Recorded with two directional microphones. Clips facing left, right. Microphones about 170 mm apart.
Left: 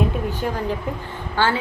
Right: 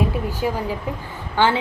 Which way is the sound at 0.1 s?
10° right (ahead or behind).